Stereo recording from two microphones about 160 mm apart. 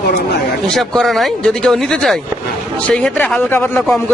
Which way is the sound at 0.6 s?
Centre (ahead or behind).